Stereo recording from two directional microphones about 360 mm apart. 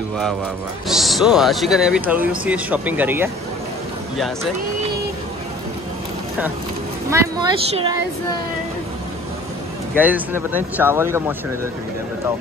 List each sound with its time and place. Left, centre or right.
0.8 s speech: centre
7.1 s speech: centre
9.9 s speech: centre